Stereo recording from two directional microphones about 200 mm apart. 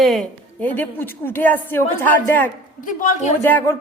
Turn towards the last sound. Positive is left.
turn(degrees=10)  # may be behind; listen again after turning